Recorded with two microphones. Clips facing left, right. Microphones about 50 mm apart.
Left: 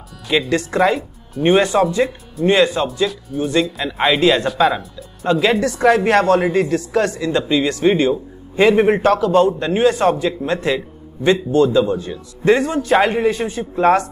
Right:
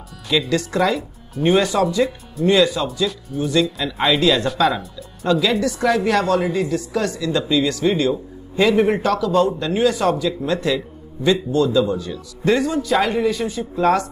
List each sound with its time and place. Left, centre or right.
0.5 s speech: left
3.3 s speech: centre
3.8 s speech: centre
4.2 s speech: left
4.6 s speech: centre
5.3 s speech: left